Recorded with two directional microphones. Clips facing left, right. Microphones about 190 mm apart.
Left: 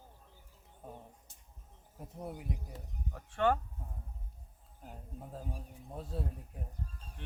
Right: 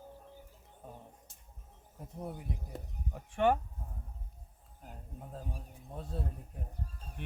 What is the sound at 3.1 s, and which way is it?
Speech, 15° right (ahead or behind).